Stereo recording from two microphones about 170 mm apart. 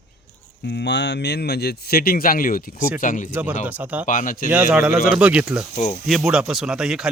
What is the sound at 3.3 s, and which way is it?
Speech, 10° right (ahead or behind).